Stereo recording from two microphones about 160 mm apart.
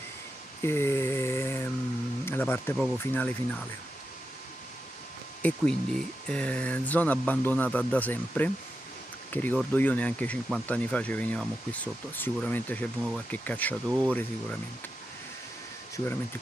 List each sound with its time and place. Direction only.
0.6 s a sound: 15° left (ahead or behind)
2.2 s speech: 15° left (ahead or behind)
5.4 s speech: 5° left (ahead or behind)